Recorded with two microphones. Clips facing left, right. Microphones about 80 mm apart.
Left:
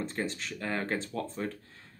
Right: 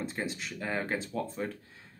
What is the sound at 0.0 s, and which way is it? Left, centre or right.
Speech, centre.